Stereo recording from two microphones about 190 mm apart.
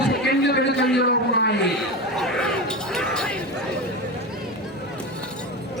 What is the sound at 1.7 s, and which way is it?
Chatter, centre (ahead or behind).